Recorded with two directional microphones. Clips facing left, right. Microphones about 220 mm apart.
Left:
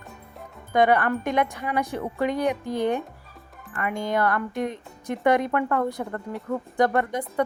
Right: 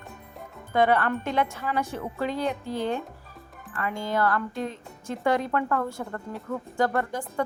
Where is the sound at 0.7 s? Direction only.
15° left (ahead or behind).